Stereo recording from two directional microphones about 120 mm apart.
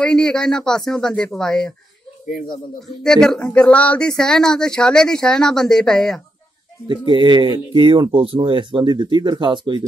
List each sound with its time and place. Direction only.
0.0 s speech: 5° left (ahead or behind)
3.0 s speech: 5° left (ahead or behind)
6.9 s speech: 40° right (ahead or behind)